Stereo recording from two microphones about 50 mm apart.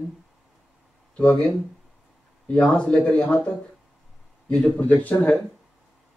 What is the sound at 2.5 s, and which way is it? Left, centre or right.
Speech, left.